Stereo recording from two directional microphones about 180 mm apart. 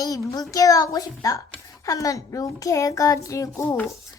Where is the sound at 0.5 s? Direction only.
20° left (ahead or behind).